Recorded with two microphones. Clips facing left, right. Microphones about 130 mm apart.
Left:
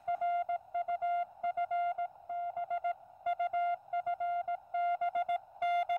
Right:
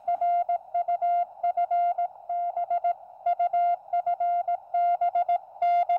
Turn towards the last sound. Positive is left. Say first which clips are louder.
# right 9 dB
turn(degrees=-30)  # may be behind; listen again after turning